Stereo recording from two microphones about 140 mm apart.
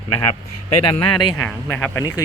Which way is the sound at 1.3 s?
15° left (ahead or behind).